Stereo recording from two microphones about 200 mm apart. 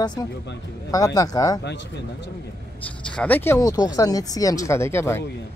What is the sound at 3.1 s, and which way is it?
Speech, 10° left (ahead or behind).